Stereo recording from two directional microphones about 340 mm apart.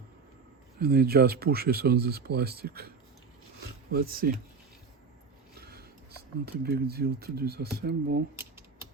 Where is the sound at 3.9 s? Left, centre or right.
Right.